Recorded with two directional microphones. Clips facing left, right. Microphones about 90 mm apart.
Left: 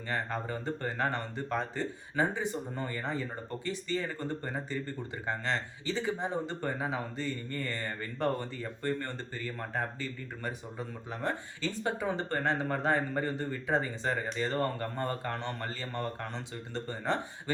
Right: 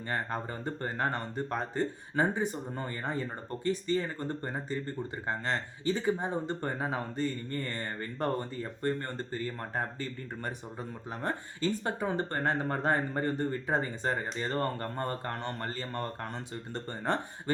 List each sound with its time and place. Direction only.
0.1 s speech: 40° right (ahead or behind)
5.2 s speech: 40° right (ahead or behind)
11.2 s speech: 40° right (ahead or behind)